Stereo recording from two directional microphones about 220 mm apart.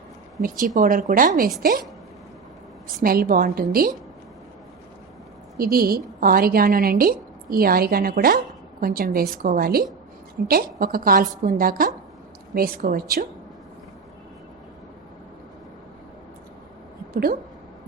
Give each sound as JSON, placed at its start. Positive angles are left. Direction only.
{"t": 0.4, "sound": "a woman's voice", "side_deg": -35}
{"t": 2.8, "sound": "a woman's voice", "side_deg": -40}
{"t": 5.5, "sound": "a woman's voice", "side_deg": -40}